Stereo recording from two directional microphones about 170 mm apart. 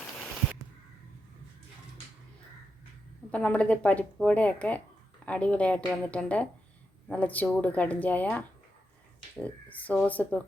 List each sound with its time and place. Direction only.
3.3 s a woman's voice: 5° left (ahead or behind)